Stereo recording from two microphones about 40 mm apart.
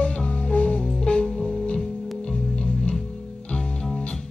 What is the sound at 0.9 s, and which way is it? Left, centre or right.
Music, left.